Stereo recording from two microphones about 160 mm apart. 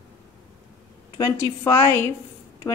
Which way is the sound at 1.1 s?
20° left (ahead or behind).